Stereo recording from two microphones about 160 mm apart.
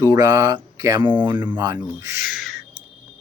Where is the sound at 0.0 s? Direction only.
20° right (ahead or behind).